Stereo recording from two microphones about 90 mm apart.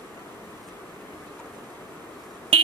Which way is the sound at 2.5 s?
90° right.